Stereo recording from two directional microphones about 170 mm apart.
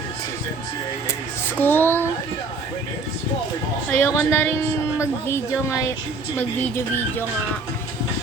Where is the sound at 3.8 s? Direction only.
10° left (ahead or behind).